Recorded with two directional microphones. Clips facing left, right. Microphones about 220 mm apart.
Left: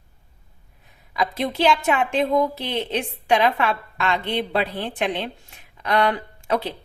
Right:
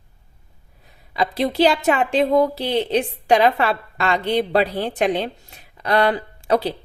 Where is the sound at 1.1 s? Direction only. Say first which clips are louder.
Right 4 dB; 30° right (ahead or behind).